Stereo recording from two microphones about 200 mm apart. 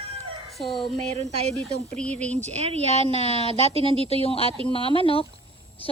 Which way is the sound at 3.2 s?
30° left (ahead or behind).